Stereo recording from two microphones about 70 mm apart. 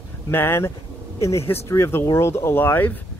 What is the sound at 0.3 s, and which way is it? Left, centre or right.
Speech, left.